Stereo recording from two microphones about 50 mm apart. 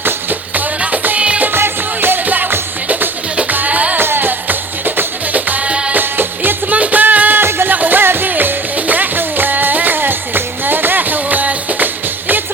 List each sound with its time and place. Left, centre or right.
0.0 s music: right
1.2 s music: right
1.5 s music: right
3.9 s music: right